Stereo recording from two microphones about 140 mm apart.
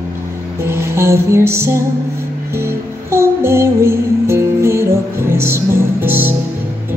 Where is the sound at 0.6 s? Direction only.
20° right (ahead or behind).